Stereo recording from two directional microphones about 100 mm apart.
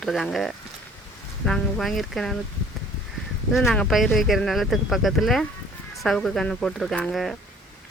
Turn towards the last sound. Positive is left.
turn(degrees=0)  # may be behind; listen again after turning